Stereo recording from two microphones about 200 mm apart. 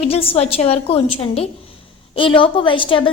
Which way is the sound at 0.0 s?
30° left (ahead or behind).